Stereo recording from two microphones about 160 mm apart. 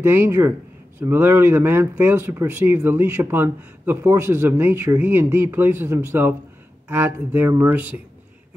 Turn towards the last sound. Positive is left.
turn(degrees=-15)  # may be behind; listen again after turning